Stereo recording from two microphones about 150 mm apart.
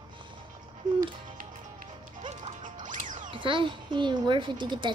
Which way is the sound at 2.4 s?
60° right (ahead or behind).